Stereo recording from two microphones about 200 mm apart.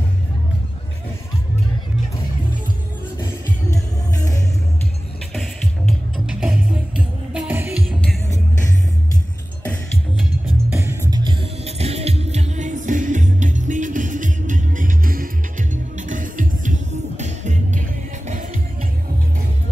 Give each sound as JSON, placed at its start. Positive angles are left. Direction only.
{"t": 5.3, "sound": "music", "side_deg": 0}
{"t": 10.7, "sound": "music", "side_deg": -15}